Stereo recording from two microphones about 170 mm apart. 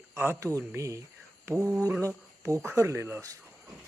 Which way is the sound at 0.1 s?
15° right (ahead or behind).